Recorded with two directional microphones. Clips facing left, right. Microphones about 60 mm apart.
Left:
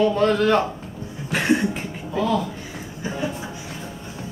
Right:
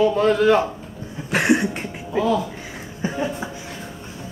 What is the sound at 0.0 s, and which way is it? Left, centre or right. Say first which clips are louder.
A man's voice: right 2 dB; centre.